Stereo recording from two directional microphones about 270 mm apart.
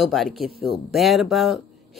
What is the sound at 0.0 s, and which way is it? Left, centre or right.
Speech, centre.